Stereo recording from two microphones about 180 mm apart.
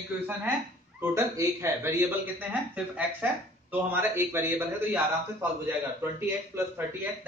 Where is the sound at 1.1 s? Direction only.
15° right (ahead or behind).